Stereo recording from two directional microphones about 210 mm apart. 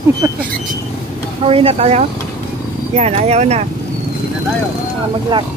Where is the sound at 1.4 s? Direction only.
25° right (ahead or behind).